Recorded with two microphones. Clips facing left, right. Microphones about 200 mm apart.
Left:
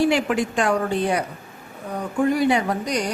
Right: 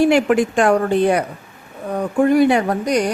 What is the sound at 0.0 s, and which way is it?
A woman's voice, 50° right (ahead or behind).